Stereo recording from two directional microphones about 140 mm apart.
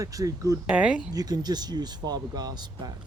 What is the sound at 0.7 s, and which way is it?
Speech, 5° right (ahead or behind).